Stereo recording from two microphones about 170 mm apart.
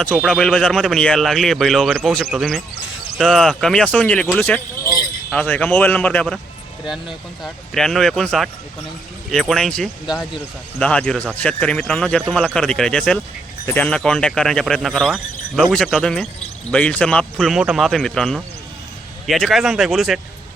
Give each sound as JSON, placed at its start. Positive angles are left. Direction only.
{"t": 0.2, "sound": "a man's voice", "side_deg": 0}